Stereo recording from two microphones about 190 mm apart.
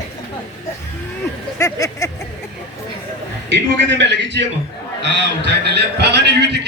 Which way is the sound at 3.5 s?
65° right (ahead or behind).